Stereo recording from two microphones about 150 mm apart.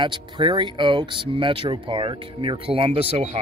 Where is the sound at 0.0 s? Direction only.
30° right (ahead or behind).